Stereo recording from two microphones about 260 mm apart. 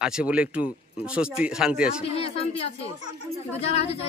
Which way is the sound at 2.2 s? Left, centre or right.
Left.